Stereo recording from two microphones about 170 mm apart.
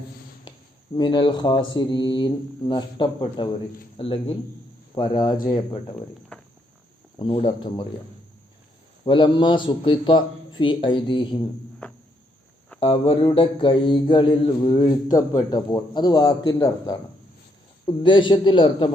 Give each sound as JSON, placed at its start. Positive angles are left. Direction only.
{"t": 0.5, "sound": "a sound", "side_deg": 25}
{"t": 0.9, "sound": "mantra", "side_deg": 30}
{"t": 3.9, "sound": "speech", "side_deg": 30}
{"t": 4.9, "sound": "mantra", "side_deg": 25}
{"t": 6.3, "sound": "walk", "side_deg": 5}
{"t": 7.2, "sound": "speech", "side_deg": 30}
{"t": 9.0, "sound": "mantra", "side_deg": 25}
{"t": 12.8, "sound": "mantra", "side_deg": 30}